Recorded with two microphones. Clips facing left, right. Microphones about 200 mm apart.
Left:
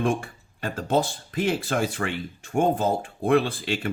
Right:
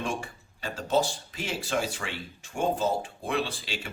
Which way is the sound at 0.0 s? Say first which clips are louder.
Left 8 dB; 55° left (ahead or behind).